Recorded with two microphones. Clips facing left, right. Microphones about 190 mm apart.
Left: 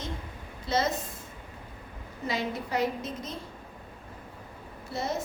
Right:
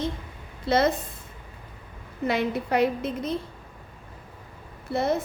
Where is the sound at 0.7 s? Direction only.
60° right (ahead or behind).